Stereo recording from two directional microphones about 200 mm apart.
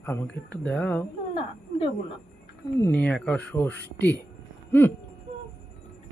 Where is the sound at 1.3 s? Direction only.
30° left (ahead or behind).